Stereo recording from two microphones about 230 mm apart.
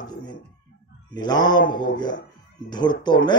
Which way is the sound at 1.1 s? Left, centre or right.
Centre.